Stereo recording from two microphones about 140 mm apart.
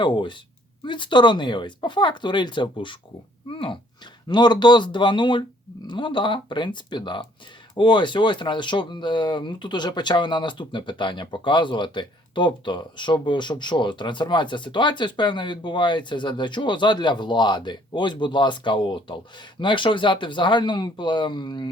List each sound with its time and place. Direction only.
0.0 s speech: 35° left (ahead or behind)